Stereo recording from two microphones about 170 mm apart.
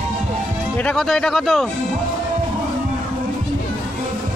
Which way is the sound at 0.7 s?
5° left (ahead or behind).